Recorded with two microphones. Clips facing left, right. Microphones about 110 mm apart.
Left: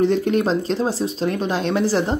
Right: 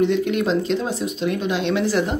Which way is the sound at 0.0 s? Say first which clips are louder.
Left 1 dB; 35° left (ahead or behind).